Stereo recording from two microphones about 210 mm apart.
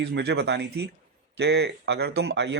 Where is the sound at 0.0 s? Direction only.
50° right (ahead or behind).